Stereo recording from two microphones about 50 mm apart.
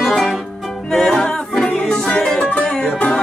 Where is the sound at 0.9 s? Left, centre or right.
Centre.